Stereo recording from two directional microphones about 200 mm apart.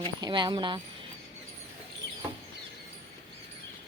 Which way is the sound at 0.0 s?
20° right (ahead or behind).